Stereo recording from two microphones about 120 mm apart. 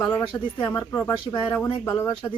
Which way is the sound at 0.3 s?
10° left (ahead or behind).